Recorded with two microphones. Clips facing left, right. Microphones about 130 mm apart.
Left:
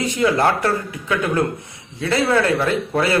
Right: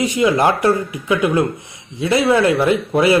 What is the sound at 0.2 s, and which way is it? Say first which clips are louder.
A man's voice: right 2 dB; 15° right (ahead or behind).